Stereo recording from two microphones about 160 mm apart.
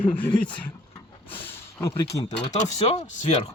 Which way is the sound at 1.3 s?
15° left (ahead or behind).